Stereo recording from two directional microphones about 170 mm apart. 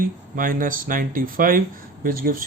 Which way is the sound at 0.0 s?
55° right (ahead or behind).